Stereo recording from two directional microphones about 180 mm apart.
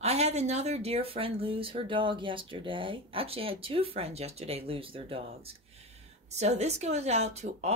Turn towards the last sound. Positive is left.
turn(degrees=-35)  # may be behind; listen again after turning